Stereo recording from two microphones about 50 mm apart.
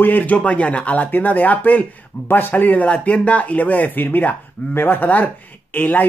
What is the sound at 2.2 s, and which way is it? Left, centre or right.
Speech, left.